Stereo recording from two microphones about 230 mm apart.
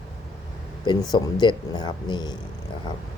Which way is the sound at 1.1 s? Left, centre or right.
Centre.